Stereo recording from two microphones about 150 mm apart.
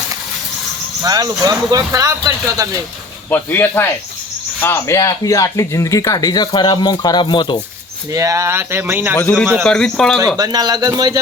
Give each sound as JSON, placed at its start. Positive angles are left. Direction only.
{"t": 1.0, "sound": "speech", "side_deg": -25}
{"t": 3.2, "sound": "speech", "side_deg": 10}
{"t": 8.1, "sound": "speech", "side_deg": -20}
{"t": 9.1, "sound": "a man's voice", "side_deg": 15}
{"t": 10.3, "sound": "speech", "side_deg": -25}